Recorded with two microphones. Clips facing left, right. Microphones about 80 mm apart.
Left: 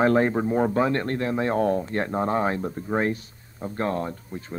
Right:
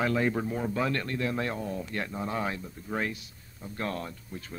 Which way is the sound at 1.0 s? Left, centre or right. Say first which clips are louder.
Left 6 dB; left.